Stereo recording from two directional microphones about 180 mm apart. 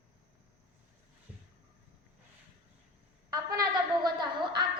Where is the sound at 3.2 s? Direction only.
20° right (ahead or behind).